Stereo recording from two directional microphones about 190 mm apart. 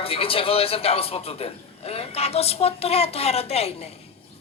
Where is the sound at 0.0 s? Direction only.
30° left (ahead or behind).